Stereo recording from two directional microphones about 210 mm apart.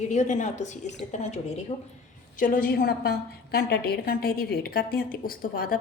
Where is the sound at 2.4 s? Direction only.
40° left (ahead or behind).